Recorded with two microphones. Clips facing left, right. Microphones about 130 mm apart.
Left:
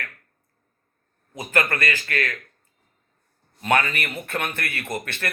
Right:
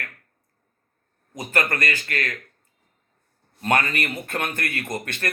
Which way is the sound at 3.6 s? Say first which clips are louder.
Even; 40° right (ahead or behind).